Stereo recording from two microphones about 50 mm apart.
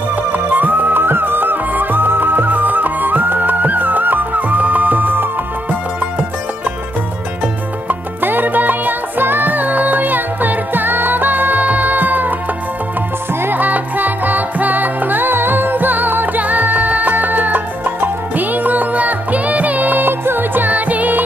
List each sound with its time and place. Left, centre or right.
0.1 s music: right
7.9 s music: right
13.3 s music: right
13.6 s music: right